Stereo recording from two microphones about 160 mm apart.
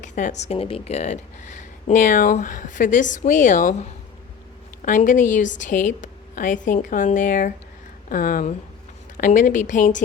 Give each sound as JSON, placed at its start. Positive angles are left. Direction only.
{"t": 0.2, "sound": "speech", "side_deg": 45}